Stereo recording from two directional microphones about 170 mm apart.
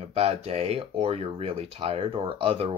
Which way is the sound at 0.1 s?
35° right (ahead or behind).